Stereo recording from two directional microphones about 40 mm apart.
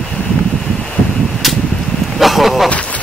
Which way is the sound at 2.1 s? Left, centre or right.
Centre.